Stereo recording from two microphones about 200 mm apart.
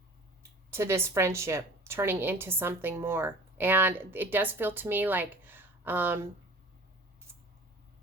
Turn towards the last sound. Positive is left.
turn(degrees=-10)  # may be behind; listen again after turning